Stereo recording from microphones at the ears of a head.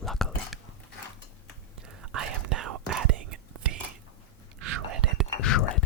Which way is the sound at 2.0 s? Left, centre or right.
Right.